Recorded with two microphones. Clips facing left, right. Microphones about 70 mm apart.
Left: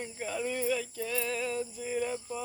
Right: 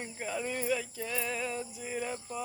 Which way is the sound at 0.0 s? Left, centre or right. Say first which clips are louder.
Left 1 dB; centre.